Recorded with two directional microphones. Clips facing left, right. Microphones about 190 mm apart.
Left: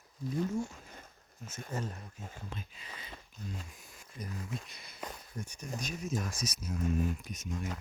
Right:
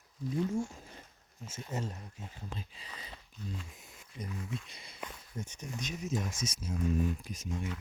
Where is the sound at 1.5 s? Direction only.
25° right (ahead or behind).